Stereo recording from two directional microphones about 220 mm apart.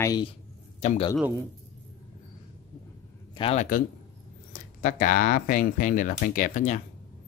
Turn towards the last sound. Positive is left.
turn(degrees=35)  # may be behind; listen again after turning